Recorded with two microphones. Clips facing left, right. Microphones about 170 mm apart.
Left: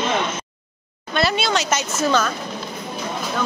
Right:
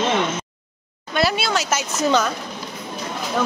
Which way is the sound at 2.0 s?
15° right (ahead or behind).